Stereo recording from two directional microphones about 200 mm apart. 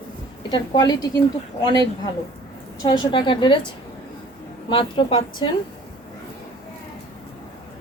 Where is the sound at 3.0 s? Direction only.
25° left (ahead or behind).